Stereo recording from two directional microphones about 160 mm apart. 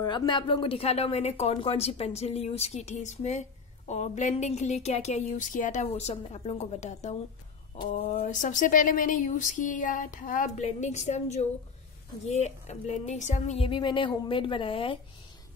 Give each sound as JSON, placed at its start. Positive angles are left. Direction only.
{"t": 0.0, "sound": "speech", "side_deg": 25}
{"t": 8.2, "sound": "speech", "side_deg": 55}